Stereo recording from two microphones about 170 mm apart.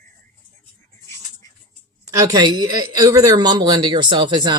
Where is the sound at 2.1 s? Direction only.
20° right (ahead or behind).